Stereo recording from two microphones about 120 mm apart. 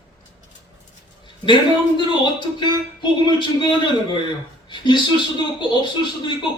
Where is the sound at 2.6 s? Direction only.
40° left (ahead or behind).